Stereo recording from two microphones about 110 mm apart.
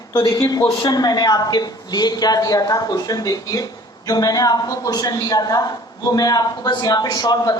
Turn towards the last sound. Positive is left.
turn(degrees=35)  # may be behind; listen again after turning